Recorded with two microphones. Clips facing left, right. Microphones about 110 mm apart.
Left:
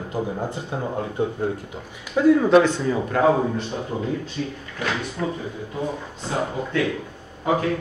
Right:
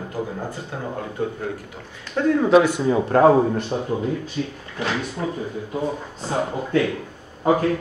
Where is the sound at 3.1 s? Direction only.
40° right (ahead or behind).